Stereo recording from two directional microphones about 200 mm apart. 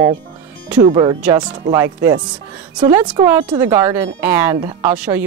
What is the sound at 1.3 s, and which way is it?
Speech, 20° right (ahead or behind).